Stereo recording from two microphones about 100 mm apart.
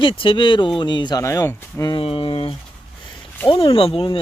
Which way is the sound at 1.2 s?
30° left (ahead or behind).